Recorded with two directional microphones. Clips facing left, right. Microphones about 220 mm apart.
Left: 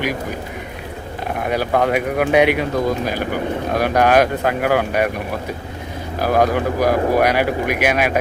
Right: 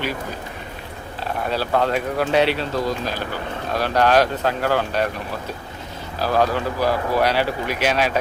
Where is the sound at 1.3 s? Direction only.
15° left (ahead or behind).